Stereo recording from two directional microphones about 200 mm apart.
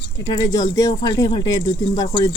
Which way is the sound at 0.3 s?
15° left (ahead or behind).